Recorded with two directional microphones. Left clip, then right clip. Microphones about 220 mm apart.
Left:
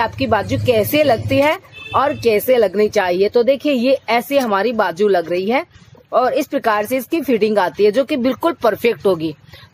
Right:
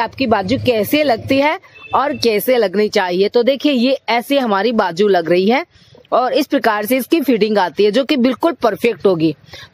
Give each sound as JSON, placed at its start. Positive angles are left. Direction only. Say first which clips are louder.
{"t": 0.0, "sound": "speech", "louder": "right 1 dB", "side_deg": -35}